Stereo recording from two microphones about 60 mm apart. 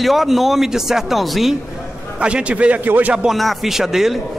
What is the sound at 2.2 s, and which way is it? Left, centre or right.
Speech, centre.